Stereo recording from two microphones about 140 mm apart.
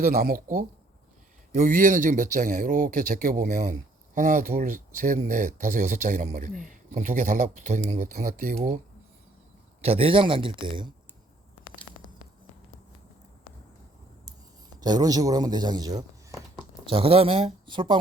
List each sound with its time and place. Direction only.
0.0 s speech: 90° right
4.6 s speech: 70° right (ahead or behind); by 8.5 s 85° right
8.5 s speech: 65° right (ahead or behind)
9.8 s a man's voice: 45° right (ahead or behind)
14.8 s speech: 30° right (ahead or behind)
16.8 s speech: 40° right (ahead or behind)